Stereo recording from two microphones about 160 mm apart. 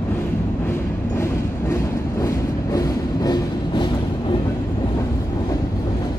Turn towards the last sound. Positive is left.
turn(degrees=25)  # may be behind; listen again after turning